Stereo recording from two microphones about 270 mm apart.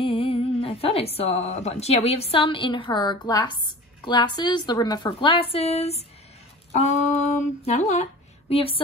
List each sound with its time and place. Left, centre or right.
0.0 s a woman's voice: centre